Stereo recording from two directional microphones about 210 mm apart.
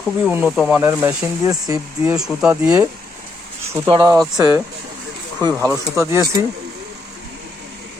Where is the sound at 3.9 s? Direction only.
20° right (ahead or behind).